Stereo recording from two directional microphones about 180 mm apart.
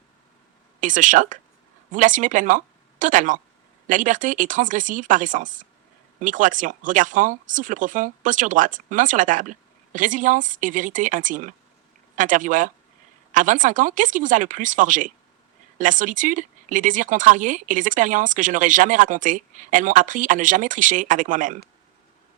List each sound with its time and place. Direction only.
0.8 s speech: 45° right (ahead or behind)